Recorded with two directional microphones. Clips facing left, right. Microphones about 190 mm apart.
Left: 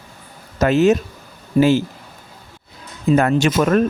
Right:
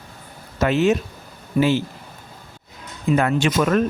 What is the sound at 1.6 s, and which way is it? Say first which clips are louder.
Speech: left 4 dB; 30° left (ahead or behind).